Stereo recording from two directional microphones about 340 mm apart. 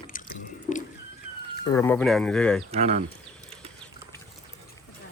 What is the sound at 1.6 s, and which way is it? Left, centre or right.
Speech, centre.